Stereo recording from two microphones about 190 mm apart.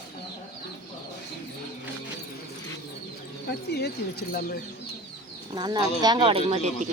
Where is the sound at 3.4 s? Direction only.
60° left (ahead or behind).